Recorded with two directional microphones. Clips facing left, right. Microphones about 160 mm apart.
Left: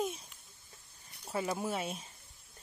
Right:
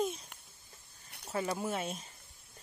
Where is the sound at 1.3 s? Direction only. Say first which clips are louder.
Even; 10° left (ahead or behind).